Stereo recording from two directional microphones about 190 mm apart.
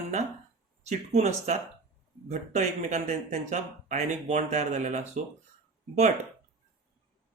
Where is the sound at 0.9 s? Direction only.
35° right (ahead or behind).